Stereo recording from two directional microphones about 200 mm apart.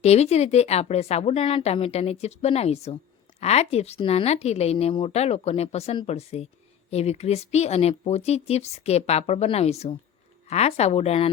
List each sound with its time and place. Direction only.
0.0 s speech: 30° left (ahead or behind)